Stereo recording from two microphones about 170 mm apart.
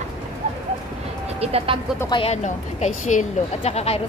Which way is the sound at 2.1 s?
30° left (ahead or behind).